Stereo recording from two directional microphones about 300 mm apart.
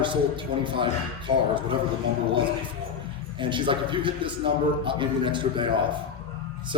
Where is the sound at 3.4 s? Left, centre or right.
Centre.